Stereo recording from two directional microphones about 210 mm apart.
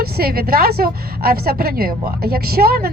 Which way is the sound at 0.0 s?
45° right (ahead or behind).